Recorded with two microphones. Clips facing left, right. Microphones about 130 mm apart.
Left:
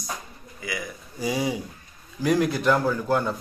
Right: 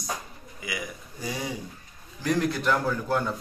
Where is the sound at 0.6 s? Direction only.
15° right (ahead or behind).